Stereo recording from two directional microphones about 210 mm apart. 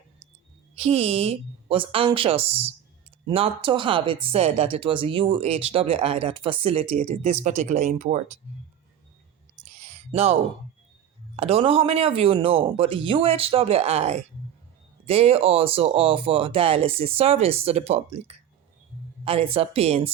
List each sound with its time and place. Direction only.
0.8 s speech: 30° right (ahead or behind)
9.6 s a sound: 35° right (ahead or behind)
11.3 s speech: 25° right (ahead or behind)